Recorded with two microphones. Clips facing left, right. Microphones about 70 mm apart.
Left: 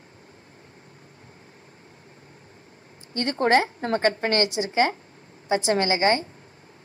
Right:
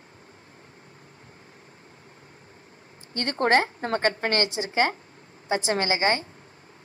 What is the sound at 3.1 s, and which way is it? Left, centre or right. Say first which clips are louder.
A woman's voice: left 1 dB; right.